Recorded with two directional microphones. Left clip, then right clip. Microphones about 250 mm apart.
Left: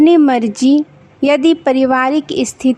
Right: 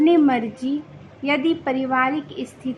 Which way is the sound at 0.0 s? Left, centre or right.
Left.